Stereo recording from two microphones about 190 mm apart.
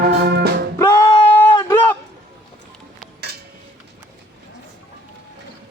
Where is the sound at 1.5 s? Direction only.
25° left (ahead or behind).